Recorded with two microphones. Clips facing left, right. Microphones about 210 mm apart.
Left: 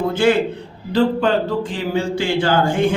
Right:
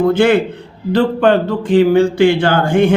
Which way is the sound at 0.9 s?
60° right (ahead or behind).